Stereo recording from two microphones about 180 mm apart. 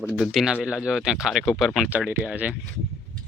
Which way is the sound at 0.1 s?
Centre (ahead or behind).